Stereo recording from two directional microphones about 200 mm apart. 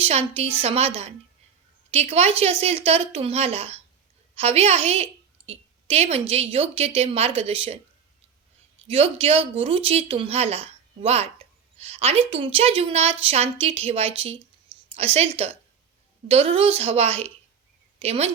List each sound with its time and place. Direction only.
0.0 s a woman's voice: 30° right (ahead or behind)
8.9 s a woman's voice: 30° right (ahead or behind)